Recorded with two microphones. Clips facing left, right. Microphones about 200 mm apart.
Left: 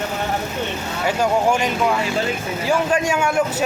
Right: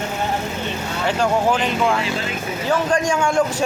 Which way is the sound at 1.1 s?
10° left (ahead or behind).